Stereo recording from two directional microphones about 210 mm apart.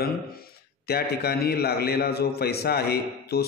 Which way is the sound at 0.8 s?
50° left (ahead or behind).